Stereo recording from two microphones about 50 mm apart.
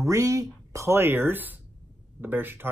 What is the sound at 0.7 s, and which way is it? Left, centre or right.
Speech, right.